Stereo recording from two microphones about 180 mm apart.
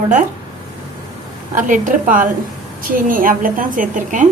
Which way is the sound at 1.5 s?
45° right (ahead or behind).